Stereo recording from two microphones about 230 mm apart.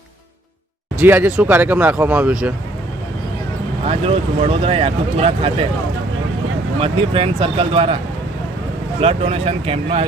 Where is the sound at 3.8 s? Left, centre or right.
Right.